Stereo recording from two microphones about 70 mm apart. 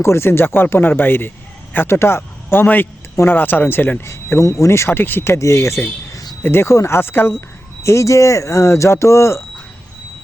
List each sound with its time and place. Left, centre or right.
0.0 s speech: left
5.3 s speech: left
7.9 s speech: left